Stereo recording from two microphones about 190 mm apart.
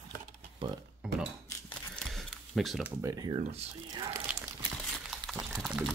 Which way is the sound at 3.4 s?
35° right (ahead or behind).